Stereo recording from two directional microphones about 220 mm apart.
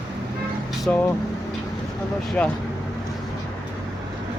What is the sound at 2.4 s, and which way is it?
Speech, 5° left (ahead or behind).